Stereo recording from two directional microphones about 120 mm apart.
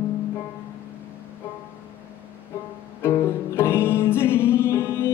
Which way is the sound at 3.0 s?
20° left (ahead or behind).